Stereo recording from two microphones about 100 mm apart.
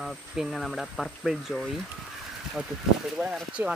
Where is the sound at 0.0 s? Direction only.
5° right (ahead or behind).